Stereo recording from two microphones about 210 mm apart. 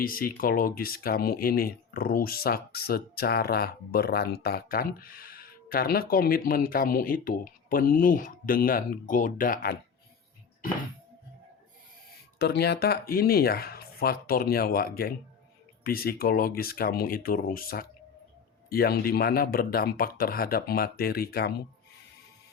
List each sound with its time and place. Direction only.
0.0 s speech: 45° left (ahead or behind)
12.4 s speech: 50° left (ahead or behind)